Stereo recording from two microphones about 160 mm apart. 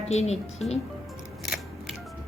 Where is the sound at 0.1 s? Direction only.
45° left (ahead or behind).